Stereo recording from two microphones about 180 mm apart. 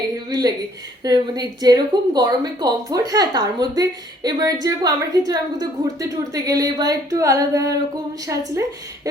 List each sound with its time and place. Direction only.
0.3 s a woman's voice: 20° right (ahead or behind)